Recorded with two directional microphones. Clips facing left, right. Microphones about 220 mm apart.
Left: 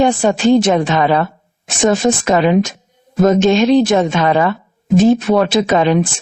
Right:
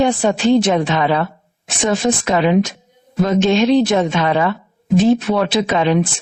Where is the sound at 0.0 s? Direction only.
45° left (ahead or behind).